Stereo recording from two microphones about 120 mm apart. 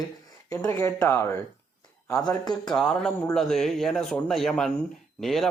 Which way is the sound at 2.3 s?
35° left (ahead or behind).